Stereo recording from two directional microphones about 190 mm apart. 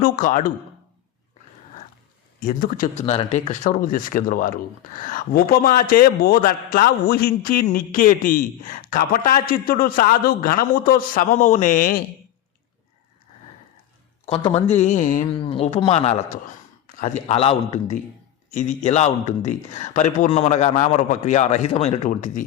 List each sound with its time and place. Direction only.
0.0 s a man's voice: 45° left (ahead or behind)
2.4 s a man's voice: 45° left (ahead or behind)
3.0 s a man's voice: 35° left (ahead or behind)
14.3 s a man's voice: 30° left (ahead or behind)
15.3 s a man's voice: 30° left (ahead or behind)